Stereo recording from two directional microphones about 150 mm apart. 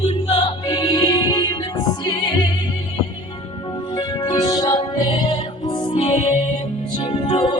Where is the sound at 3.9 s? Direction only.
30° left (ahead or behind).